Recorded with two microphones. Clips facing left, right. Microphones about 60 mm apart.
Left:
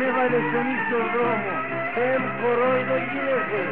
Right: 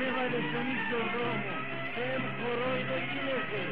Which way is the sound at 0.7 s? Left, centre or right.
Left.